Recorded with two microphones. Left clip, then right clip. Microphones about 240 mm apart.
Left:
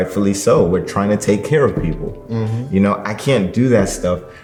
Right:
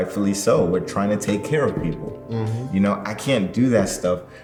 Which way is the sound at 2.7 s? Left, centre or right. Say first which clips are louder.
Left 6 dB; left.